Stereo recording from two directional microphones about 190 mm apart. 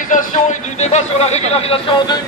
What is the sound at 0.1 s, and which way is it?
A man's voice, 40° left (ahead or behind).